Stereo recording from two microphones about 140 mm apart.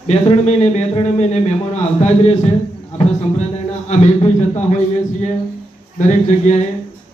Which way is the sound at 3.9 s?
50° left (ahead or behind).